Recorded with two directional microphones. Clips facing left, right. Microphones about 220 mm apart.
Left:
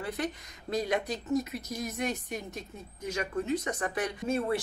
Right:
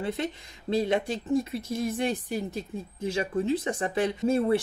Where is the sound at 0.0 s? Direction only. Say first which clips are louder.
Right 3 dB; 25° right (ahead or behind).